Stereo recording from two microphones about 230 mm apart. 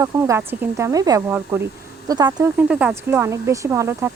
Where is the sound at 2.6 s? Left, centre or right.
Centre.